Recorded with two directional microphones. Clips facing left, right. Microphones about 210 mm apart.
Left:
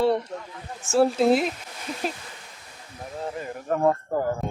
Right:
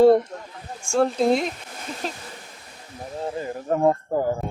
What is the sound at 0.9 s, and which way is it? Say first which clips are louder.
Speech: left 1 dB; 5° left (ahead or behind).